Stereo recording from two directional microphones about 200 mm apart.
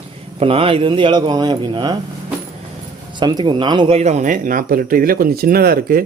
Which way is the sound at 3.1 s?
20° right (ahead or behind).